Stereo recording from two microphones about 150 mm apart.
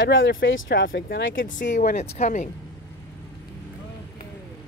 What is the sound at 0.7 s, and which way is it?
Speech, 90° left.